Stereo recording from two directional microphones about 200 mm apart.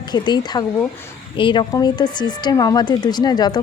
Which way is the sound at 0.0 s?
20° left (ahead or behind).